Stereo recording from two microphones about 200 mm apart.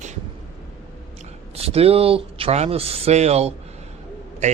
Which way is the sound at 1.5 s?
30° right (ahead or behind).